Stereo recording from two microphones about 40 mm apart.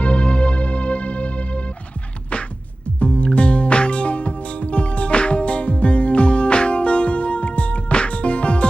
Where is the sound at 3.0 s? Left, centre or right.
Left.